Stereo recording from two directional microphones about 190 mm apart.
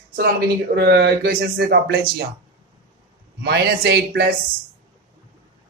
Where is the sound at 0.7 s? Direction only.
55° right (ahead or behind).